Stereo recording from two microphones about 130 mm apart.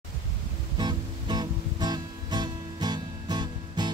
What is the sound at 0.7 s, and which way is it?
Music, 35° right (ahead or behind).